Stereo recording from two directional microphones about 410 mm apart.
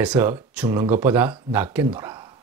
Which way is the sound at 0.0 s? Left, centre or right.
Centre.